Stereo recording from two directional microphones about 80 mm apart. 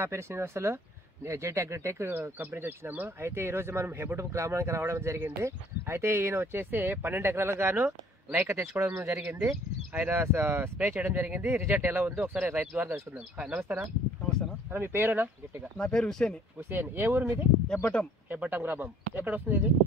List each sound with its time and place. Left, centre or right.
0.0 s speech: right
15.8 s speech: centre
16.5 s speech: right